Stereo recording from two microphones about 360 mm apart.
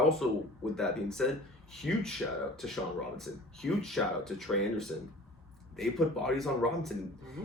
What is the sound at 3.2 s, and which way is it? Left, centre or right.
Speech, centre.